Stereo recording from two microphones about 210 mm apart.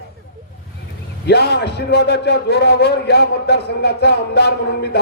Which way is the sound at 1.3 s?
50° left (ahead or behind).